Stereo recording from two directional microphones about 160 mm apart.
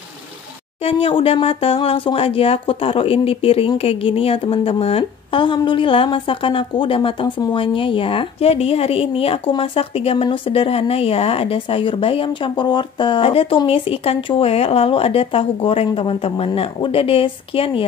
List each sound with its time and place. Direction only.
0.8 s speech: 35° left (ahead or behind)